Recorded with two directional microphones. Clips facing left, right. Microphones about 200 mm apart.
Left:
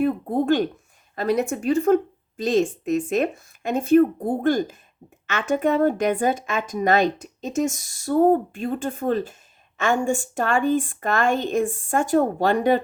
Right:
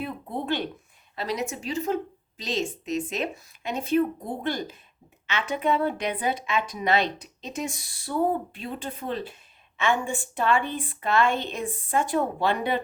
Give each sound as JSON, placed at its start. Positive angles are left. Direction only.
{"t": 0.0, "sound": "speech", "side_deg": 45}